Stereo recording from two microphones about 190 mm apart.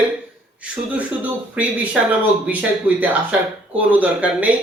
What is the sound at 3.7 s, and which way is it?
Speech, 5° right (ahead or behind).